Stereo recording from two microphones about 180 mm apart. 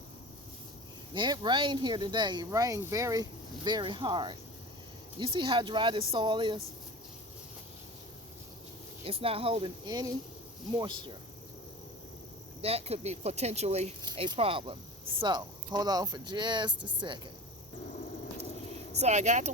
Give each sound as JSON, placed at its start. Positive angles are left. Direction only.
{"t": 1.1, "sound": "speech", "side_deg": -25}
{"t": 9.0, "sound": "speech", "side_deg": -30}
{"t": 12.6, "sound": "speech", "side_deg": -35}
{"t": 18.9, "sound": "speech", "side_deg": -40}